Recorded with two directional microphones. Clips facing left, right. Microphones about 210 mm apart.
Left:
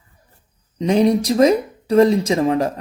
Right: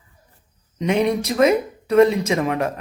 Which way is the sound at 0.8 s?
30° left (ahead or behind).